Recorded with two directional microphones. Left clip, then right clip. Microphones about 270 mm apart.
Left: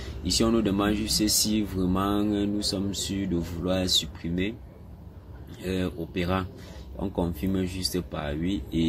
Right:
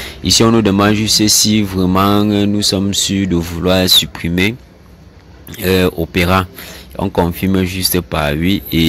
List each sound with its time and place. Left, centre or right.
0.2 s speech: right
5.6 s speech: right